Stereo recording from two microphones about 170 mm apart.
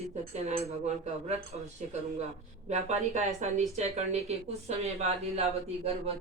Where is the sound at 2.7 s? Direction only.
40° right (ahead or behind).